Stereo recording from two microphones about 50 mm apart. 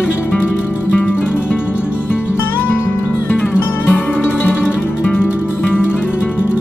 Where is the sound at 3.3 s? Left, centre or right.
Left.